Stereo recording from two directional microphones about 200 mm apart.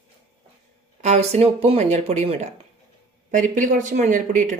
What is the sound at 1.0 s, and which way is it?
Speech, 35° right (ahead or behind).